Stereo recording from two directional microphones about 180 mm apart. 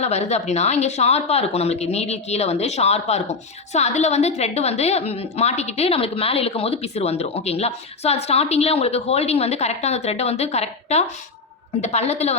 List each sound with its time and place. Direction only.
0.0 s speech: 35° left (ahead or behind)